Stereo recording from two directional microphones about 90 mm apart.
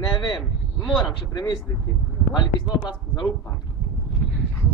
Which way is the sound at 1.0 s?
65° left (ahead or behind).